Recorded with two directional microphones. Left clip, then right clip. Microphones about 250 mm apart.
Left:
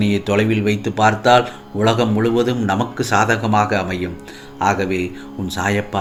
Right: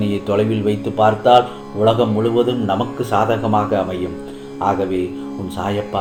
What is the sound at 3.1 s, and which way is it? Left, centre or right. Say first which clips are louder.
Speech: even; left.